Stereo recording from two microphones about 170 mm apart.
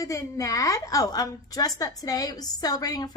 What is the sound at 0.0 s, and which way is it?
A woman's voice, 20° left (ahead or behind).